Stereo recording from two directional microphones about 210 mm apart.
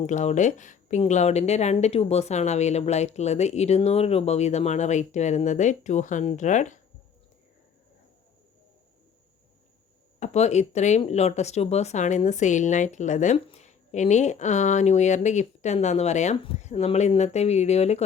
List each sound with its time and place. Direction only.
0.0 s speech: 35° left (ahead or behind)
10.2 s speech: 30° left (ahead or behind)